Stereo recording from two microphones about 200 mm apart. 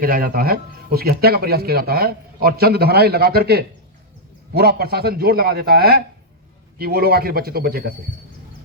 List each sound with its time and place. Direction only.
0.0 s speech: 45° right (ahead or behind)